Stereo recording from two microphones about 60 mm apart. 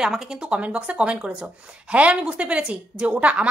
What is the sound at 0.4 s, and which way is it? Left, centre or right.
Speech, centre.